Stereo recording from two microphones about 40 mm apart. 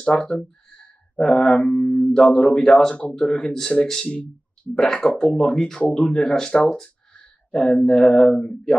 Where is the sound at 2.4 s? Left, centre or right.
Centre.